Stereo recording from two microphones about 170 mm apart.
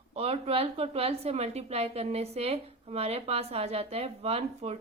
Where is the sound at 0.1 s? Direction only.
35° right (ahead or behind).